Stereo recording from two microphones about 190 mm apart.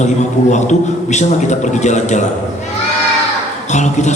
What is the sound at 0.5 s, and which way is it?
A man's voice, 40° left (ahead or behind).